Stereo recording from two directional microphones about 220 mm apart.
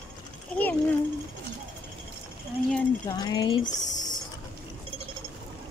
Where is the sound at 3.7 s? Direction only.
35° left (ahead or behind).